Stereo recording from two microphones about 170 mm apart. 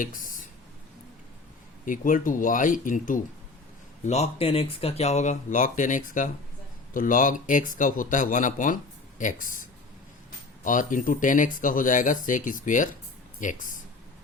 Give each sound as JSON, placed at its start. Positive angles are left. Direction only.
{"t": 0.0, "sound": "speech", "side_deg": 55}
{"t": 1.8, "sound": "speech", "side_deg": 50}
{"t": 4.0, "sound": "speech", "side_deg": 40}